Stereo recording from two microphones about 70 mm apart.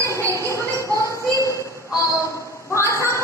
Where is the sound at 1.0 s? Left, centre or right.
Left.